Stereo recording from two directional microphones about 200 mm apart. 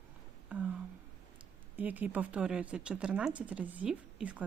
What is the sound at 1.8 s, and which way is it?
Speech, 10° right (ahead or behind).